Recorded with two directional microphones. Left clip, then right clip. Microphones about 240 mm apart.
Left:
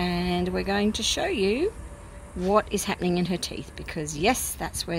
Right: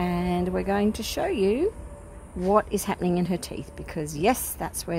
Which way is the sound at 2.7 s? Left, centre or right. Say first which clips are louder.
Even; centre.